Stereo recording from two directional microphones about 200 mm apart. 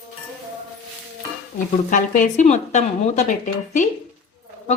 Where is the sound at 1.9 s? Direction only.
40° left (ahead or behind).